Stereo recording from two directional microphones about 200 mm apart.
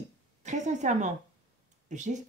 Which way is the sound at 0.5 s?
35° right (ahead or behind).